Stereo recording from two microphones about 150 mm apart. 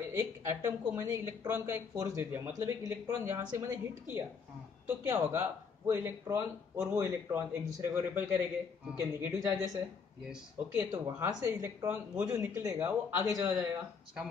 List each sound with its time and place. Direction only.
0.1 s speech: 15° right (ahead or behind)
10.2 s speech: 10° right (ahead or behind)
10.9 s speech: 25° right (ahead or behind)